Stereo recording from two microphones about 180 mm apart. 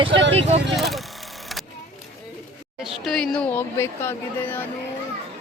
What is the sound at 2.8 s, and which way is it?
Speech, centre (ahead or behind).